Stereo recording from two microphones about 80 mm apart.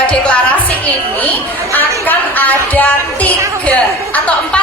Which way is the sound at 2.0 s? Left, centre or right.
Left.